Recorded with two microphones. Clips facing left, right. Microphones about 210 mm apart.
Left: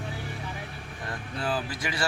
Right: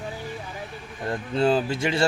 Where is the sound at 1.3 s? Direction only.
25° right (ahead or behind).